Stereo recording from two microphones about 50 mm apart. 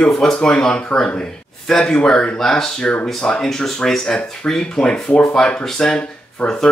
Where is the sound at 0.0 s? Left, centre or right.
Centre.